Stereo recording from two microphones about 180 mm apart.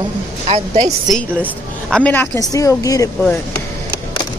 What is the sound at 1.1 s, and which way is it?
A woman's voice, 5° left (ahead or behind).